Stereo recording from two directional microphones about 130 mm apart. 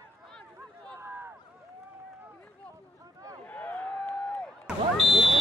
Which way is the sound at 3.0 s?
25° right (ahead or behind).